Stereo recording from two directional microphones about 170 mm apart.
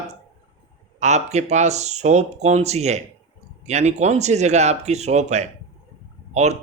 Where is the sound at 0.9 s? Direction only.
40° right (ahead or behind).